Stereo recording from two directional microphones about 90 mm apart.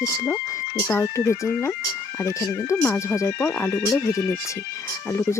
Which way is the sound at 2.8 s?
30° left (ahead or behind).